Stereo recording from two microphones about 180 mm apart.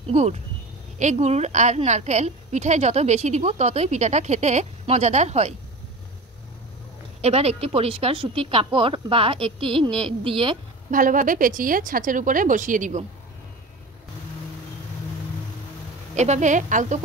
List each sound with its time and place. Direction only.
0.1 s a woman's voice: 40° right (ahead or behind)
7.2 s a woman's voice: 35° right (ahead or behind)
10.9 s speech: 50° right (ahead or behind)
16.2 s speech: 40° right (ahead or behind)